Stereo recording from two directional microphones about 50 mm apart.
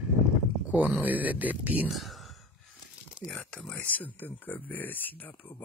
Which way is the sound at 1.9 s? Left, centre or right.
Centre.